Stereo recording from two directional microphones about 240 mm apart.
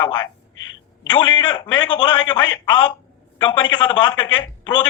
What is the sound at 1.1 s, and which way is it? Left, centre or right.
Speech, centre.